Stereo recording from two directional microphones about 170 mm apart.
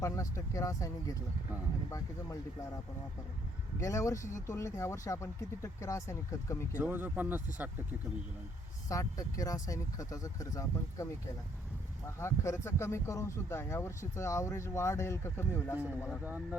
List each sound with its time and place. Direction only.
0.0 s speech: 20° left (ahead or behind)
3.8 s speech: 20° left (ahead or behind)
6.7 s speech: 10° right (ahead or behind)
8.9 s speech: 20° left (ahead or behind)
12.2 s speech: 15° left (ahead or behind)
16.2 s speech: 10° right (ahead or behind)